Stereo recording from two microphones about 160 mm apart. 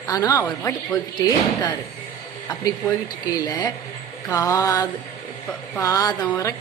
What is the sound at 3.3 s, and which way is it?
Speech, 25° left (ahead or behind).